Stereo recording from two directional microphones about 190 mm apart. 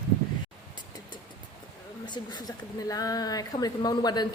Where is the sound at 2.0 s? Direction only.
20° left (ahead or behind).